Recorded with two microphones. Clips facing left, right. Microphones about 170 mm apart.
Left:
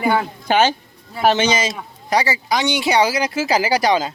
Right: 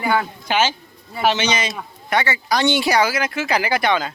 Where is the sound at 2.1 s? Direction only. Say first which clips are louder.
Left 2 dB; 35° left (ahead or behind).